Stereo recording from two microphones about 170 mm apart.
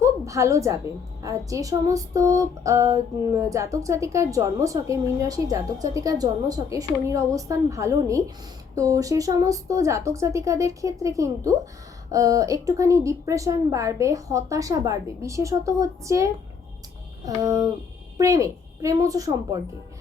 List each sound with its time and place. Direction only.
0.0 s a woman's voice: 15° right (ahead or behind)
1.2 s female singing: 20° right (ahead or behind)